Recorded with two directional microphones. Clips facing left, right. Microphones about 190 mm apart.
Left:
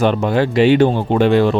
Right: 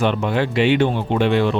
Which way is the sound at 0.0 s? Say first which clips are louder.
Left 4 dB; 40° left (ahead or behind).